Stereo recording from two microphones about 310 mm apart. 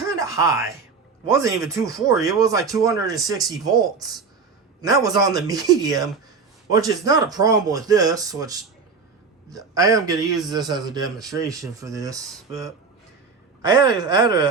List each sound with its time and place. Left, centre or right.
0.0 s music: centre
1.3 s speech: centre